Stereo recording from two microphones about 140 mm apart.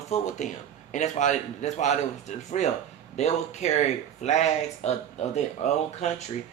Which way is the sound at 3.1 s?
55° left (ahead or behind).